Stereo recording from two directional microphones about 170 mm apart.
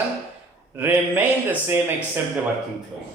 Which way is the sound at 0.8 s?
10° right (ahead or behind).